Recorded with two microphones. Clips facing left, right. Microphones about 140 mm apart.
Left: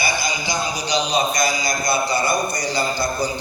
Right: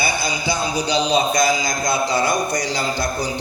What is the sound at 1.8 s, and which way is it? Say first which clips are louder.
A man's voice: right 2 dB; 90° right.